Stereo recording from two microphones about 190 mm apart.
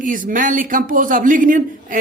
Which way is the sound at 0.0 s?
45° right (ahead or behind).